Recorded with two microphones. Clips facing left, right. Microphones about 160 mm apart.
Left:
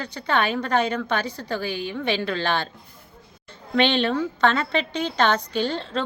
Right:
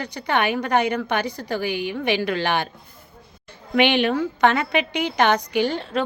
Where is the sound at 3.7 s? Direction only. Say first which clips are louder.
Right 2 dB; 15° right (ahead or behind).